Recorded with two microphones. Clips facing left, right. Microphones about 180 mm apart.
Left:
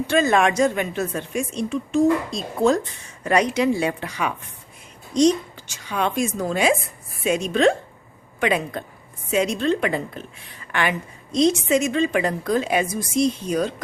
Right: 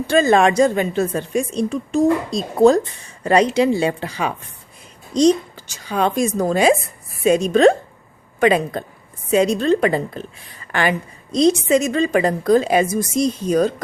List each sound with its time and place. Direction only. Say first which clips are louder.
0.1 s a woman's voice: right 5 dB; 30° right (ahead or behind)